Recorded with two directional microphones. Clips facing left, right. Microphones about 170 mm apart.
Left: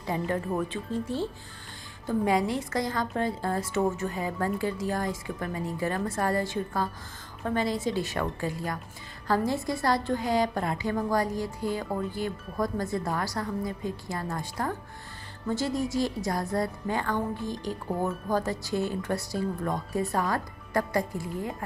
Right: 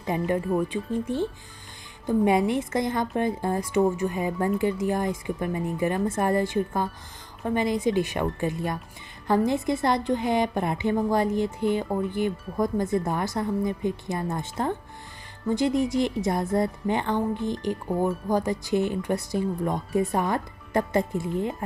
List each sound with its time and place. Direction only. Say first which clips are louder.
0.0 s speech: right 4 dB; 15° right (ahead or behind)